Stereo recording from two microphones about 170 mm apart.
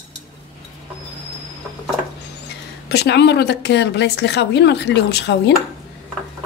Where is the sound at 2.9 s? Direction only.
80° left.